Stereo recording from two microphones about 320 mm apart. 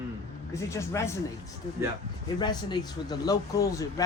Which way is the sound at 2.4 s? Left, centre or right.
Centre.